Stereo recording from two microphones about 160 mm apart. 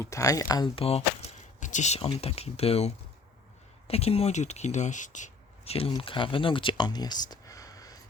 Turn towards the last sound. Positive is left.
turn(degrees=20)  # may be behind; listen again after turning